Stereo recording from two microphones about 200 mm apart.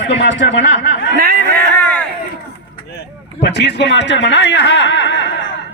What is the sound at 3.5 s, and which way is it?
A man's voice, 60° left (ahead or behind).